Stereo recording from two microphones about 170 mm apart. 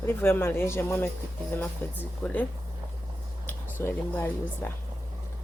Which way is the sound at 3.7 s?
10° left (ahead or behind).